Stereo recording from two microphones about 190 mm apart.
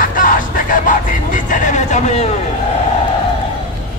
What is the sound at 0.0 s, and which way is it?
Music, 45° left (ahead or behind).